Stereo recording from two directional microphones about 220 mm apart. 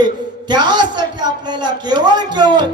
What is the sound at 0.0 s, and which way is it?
A man's voice, 20° right (ahead or behind).